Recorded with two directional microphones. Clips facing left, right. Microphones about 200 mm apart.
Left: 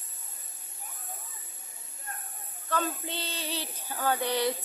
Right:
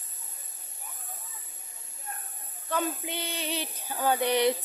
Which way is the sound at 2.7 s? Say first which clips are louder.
Right 1 dB; 15° right (ahead or behind).